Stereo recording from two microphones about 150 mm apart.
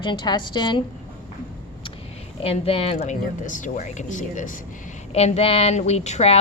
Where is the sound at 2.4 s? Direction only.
40° left (ahead or behind); by 4.6 s 60° left (ahead or behind).